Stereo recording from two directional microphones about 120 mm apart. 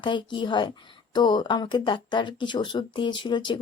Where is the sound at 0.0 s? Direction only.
40° left (ahead or behind).